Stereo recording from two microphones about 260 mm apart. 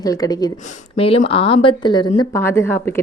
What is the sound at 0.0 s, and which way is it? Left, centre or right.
A woman's voice, centre.